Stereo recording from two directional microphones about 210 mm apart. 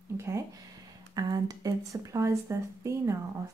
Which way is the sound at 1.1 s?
20° right (ahead or behind).